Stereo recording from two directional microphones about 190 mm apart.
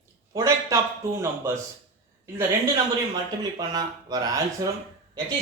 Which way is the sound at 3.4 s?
20° right (ahead or behind).